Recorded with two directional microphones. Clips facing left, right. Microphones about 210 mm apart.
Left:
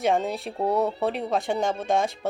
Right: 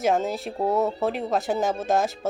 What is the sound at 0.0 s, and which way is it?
Speech, centre (ahead or behind).